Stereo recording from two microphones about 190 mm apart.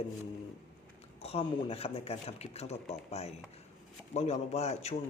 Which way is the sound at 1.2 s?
30° left (ahead or behind).